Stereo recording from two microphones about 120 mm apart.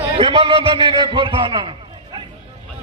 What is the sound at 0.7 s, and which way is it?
A man's voice, 45° right (ahead or behind).